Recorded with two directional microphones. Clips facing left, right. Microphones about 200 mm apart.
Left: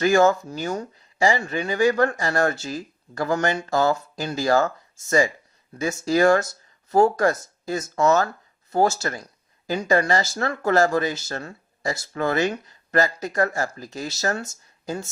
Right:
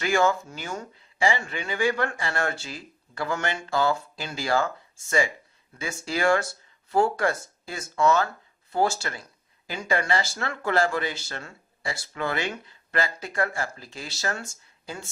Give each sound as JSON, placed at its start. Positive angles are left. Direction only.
{"t": 0.0, "sound": "speech", "side_deg": 40}